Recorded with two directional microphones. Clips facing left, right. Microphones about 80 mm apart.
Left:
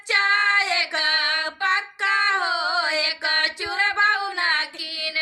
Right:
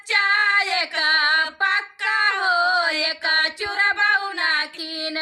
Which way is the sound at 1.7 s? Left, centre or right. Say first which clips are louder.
Even; left.